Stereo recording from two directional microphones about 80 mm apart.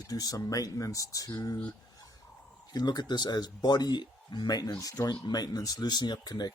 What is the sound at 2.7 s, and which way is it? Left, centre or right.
Speech, left.